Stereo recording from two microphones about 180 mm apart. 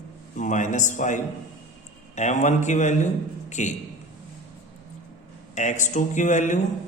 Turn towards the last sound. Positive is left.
turn(degrees=45)  # may be behind; listen again after turning